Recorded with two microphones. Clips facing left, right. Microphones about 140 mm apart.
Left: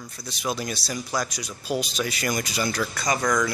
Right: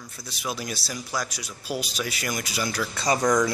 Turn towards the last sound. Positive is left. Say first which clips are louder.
# right 2 dB
turn(degrees=-15)  # may be behind; listen again after turning